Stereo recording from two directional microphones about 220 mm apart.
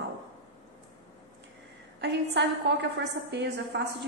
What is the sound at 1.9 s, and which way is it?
A woman's voice, 50° right (ahead or behind).